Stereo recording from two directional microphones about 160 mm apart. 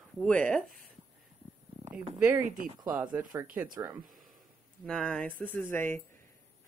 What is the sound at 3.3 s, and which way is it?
Speech, 20° right (ahead or behind).